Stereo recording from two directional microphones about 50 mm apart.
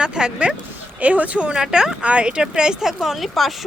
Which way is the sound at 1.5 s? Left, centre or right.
Centre.